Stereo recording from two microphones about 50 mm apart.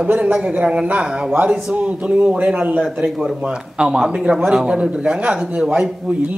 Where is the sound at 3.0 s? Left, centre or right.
Centre.